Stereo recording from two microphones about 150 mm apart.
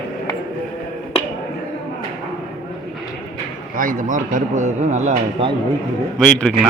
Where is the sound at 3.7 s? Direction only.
65° right (ahead or behind); by 5.5 s 40° right (ahead or behind).